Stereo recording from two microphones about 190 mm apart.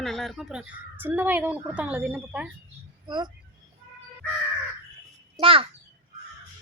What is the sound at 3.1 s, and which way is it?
Speech, 20° right (ahead or behind).